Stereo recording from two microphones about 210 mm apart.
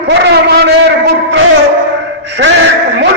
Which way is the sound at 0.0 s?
50° right (ahead or behind).